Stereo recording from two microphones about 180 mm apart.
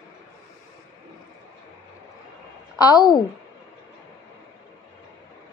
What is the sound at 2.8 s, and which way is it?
Speech, 20° left (ahead or behind).